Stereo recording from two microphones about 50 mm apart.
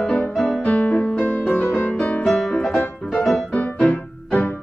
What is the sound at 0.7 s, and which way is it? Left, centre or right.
Music, left.